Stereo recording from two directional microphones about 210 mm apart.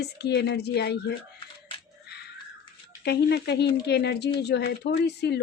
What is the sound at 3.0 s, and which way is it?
Speech, 55° left (ahead or behind).